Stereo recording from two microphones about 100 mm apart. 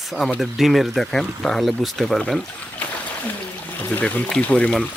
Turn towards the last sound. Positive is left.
turn(degrees=10)  # may be behind; listen again after turning